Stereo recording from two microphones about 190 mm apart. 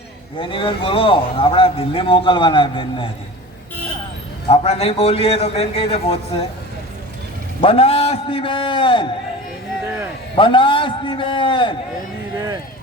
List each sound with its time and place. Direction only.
0.3 s a man's voice: 25° left (ahead or behind)
4.4 s a man's voice: 30° left (ahead or behind)
7.6 s a man's voice: 30° left (ahead or behind)
10.3 s a man's voice: 25° left (ahead or behind)